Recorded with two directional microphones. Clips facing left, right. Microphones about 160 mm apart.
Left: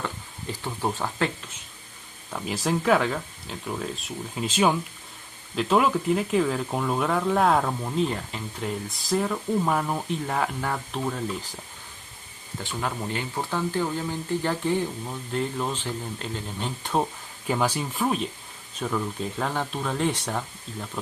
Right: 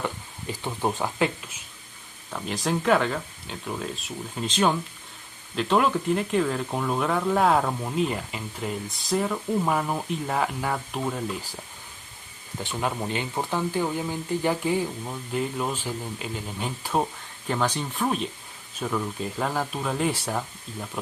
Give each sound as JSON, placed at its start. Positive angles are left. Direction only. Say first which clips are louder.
{"t": 0.6, "sound": "speech", "louder": "right 2 dB", "side_deg": -15}
{"t": 2.3, "sound": "speech", "louder": "left 1 dB", "side_deg": 5}
{"t": 12.6, "sound": "speech", "louder": "right 2 dB", "side_deg": -20}
{"t": 17.5, "sound": "speech", "louder": "left 1 dB", "side_deg": 10}